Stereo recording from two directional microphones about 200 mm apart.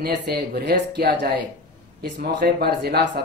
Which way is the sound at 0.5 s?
55° right (ahead or behind).